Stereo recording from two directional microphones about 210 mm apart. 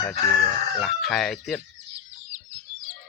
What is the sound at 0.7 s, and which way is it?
Speech, centre (ahead or behind).